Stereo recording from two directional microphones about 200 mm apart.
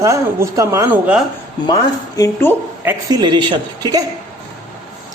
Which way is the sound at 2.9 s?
20° right (ahead or behind).